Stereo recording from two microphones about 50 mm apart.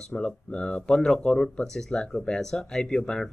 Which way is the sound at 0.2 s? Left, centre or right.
Centre.